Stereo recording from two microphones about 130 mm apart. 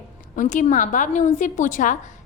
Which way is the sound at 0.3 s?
75° left (ahead or behind).